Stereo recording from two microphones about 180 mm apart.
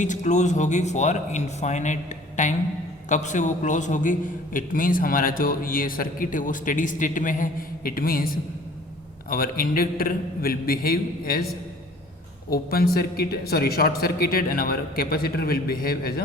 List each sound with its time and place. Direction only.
0.0 s a man's voice: 45° left (ahead or behind)
9.3 s speech: 55° left (ahead or behind)
12.5 s speech: 55° left (ahead or behind)